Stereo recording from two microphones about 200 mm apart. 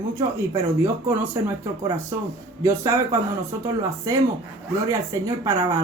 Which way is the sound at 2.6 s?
15° right (ahead or behind).